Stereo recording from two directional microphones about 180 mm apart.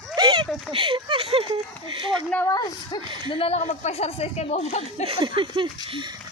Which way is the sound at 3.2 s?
35° left (ahead or behind).